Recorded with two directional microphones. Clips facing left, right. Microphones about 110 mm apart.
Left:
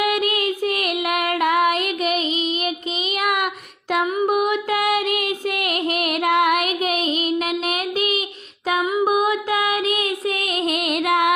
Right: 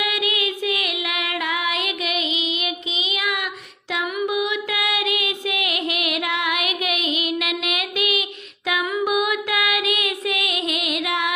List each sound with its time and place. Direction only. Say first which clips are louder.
0.0 s child singing: left 4 dB; 45° left (ahead or behind)
3.9 s music: left 4 dB; 45° left (ahead or behind)
8.8 s a sound: left 4 dB; 25° left (ahead or behind)
9.0 s music: left 3 dB; 35° left (ahead or behind); by 11.3 s 50° left (ahead or behind)